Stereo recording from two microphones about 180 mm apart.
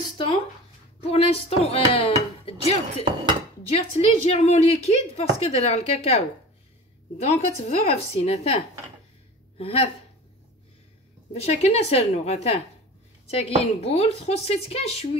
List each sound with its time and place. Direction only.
1.1 s a woman's voice: 35° left (ahead or behind)
11.3 s a woman's voice: 35° left (ahead or behind)